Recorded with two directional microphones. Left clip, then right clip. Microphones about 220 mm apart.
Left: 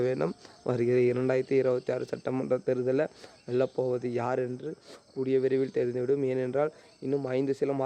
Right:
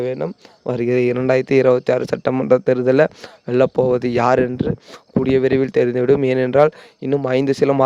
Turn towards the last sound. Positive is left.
turn(degrees=-45)  # may be behind; listen again after turning